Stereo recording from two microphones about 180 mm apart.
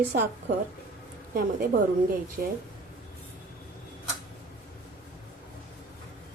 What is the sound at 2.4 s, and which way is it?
Speech, 55° right (ahead or behind).